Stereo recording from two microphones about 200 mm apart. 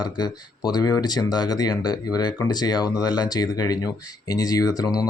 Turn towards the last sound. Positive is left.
turn(degrees=20)  # may be behind; listen again after turning